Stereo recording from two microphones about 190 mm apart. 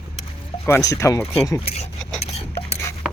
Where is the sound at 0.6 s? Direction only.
15° left (ahead or behind).